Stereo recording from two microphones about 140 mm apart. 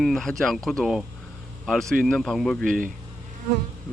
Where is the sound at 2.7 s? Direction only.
75° right (ahead or behind).